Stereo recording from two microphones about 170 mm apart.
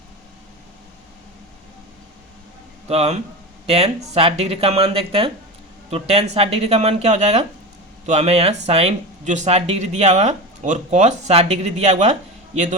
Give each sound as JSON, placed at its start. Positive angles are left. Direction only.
{"t": 2.8, "sound": "speech", "side_deg": -40}